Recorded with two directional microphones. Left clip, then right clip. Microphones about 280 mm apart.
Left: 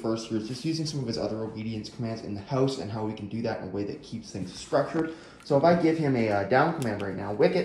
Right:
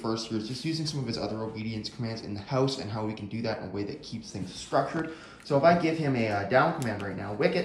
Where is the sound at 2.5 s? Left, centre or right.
Right.